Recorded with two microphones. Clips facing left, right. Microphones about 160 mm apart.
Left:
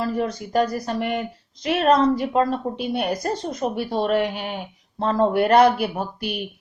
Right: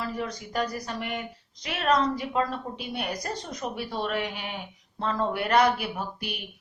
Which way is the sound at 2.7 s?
40° left (ahead or behind).